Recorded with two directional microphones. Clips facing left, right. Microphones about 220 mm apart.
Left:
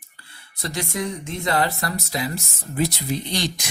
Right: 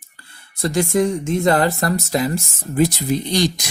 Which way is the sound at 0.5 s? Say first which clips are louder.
Right 10 dB; 50° right (ahead or behind).